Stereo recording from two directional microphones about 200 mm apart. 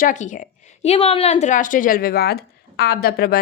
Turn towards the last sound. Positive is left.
turn(degrees=50)  # may be behind; listen again after turning